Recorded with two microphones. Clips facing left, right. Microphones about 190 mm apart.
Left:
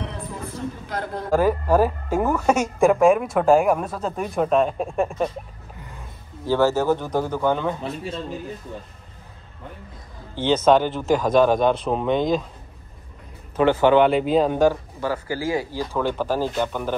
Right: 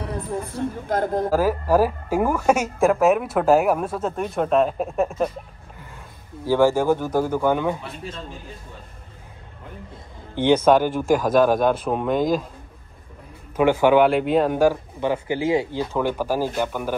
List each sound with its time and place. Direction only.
0.6 s speech: 50° right (ahead or behind)
1.3 s speech: 5° right (ahead or behind)
6.4 s speech: 10° right (ahead or behind)
10.3 s speech: 15° right (ahead or behind)
13.6 s speech: 10° right (ahead or behind)
15.0 s speech: 20° right (ahead or behind)